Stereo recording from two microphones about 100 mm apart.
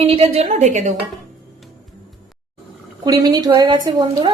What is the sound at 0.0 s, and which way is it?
Speech, 70° right (ahead or behind).